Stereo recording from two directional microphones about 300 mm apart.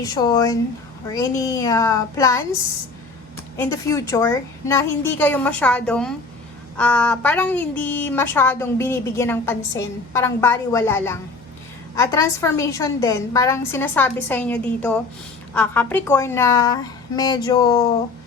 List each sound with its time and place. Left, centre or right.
0.0 s a woman's voice: centre
3.6 s a woman's voice: centre